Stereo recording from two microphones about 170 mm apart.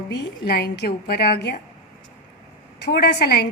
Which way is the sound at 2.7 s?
75° left (ahead or behind).